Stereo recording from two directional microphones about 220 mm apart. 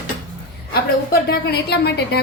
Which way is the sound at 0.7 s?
45° left (ahead or behind).